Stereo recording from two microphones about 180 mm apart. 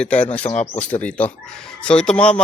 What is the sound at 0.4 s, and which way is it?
Speech, 40° left (ahead or behind).